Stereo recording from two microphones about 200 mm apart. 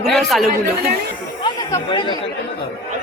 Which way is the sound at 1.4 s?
20° left (ahead or behind).